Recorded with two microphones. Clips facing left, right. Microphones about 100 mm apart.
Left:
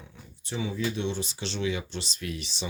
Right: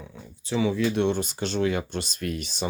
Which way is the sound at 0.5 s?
90° right.